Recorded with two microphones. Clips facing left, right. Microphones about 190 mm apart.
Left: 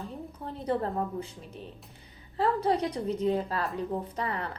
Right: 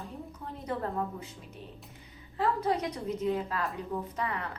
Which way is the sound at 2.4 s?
30° left (ahead or behind).